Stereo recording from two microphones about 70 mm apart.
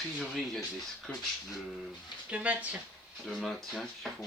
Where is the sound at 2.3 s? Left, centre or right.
Right.